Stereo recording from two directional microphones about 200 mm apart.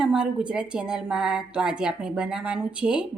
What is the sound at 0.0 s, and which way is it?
A woman's voice, 5° right (ahead or behind).